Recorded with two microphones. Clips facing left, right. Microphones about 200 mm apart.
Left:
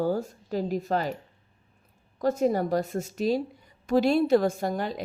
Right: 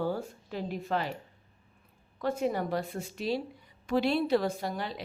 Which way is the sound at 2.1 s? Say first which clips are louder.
Left 6 dB; 40° left (ahead or behind).